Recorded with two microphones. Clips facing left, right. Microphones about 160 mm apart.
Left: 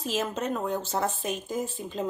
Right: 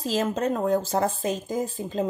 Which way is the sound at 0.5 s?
40° right (ahead or behind).